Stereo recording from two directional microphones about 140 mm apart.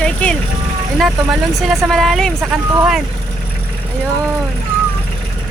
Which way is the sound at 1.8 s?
Centre (ahead or behind).